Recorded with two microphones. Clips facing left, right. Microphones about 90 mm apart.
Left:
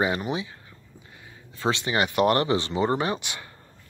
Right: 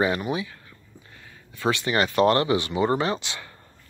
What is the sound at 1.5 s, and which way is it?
Speech, 25° left (ahead or behind).